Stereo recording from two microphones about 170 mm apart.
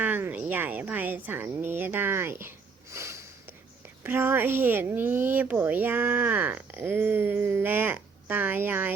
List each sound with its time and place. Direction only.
0.0 s speech: 10° right (ahead or behind)
2.9 s sniff: 15° right (ahead or behind)
4.0 s speech: 15° right (ahead or behind)